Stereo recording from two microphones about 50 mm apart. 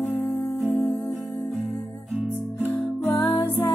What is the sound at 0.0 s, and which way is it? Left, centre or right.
Music, left.